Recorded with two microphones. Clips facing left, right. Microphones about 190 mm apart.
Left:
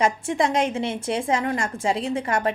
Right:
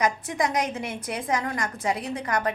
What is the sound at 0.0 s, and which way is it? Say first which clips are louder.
A woman's voice: left 3 dB; 25° left (ahead or behind).